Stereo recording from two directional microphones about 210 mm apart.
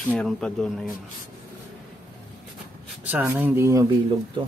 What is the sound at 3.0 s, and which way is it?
Speech, 10° right (ahead or behind).